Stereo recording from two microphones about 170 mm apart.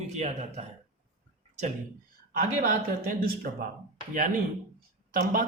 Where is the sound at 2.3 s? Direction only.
55° right (ahead or behind).